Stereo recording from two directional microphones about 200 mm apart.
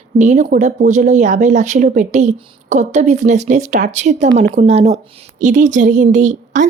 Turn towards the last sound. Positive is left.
turn(degrees=-40)  # may be behind; listen again after turning